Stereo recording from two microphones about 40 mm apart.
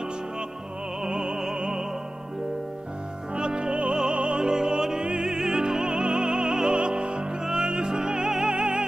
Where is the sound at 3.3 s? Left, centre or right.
Right.